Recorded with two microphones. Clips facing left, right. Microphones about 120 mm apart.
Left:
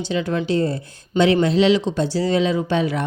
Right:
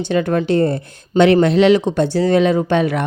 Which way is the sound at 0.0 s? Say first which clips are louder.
Right 5 dB; 55° right (ahead or behind).